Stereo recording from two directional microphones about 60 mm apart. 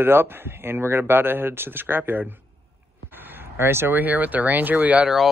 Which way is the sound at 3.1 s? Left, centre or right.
Right.